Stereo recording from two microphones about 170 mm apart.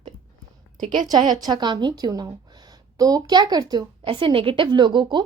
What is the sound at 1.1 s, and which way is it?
A woman's voice, 25° right (ahead or behind).